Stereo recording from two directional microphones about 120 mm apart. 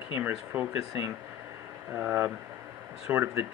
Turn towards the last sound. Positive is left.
turn(degrees=-20)  # may be behind; listen again after turning